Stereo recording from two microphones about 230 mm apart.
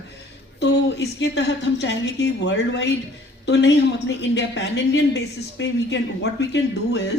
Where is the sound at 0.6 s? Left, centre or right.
Left.